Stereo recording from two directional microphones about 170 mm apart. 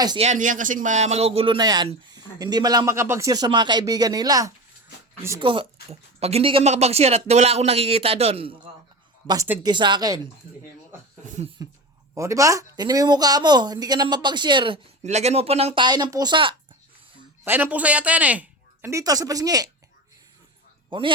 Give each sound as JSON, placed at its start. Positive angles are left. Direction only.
{"t": 0.2, "sound": "speech", "side_deg": -45}
{"t": 9.2, "sound": "speech", "side_deg": -20}
{"t": 11.6, "sound": "speech", "side_deg": -20}
{"t": 15.0, "sound": "speech", "side_deg": -40}
{"t": 17.4, "sound": "speech", "side_deg": -10}
{"t": 20.9, "sound": "speech", "side_deg": -30}